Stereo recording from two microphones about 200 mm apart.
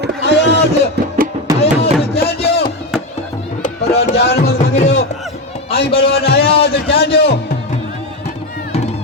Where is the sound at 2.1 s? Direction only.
55° left (ahead or behind).